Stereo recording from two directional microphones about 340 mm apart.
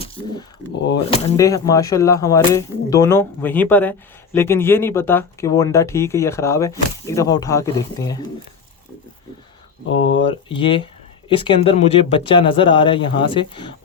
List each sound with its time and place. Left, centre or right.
1.1 s speech: centre
9.8 s speech: left
10.5 s speech: centre